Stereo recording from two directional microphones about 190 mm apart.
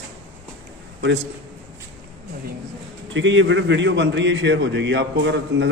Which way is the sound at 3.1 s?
80° right.